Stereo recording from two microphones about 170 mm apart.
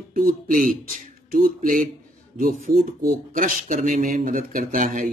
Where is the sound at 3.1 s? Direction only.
50° right (ahead or behind).